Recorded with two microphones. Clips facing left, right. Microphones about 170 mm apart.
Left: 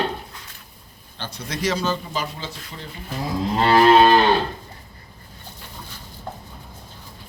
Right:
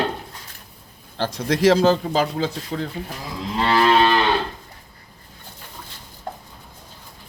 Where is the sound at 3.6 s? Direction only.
40° left (ahead or behind).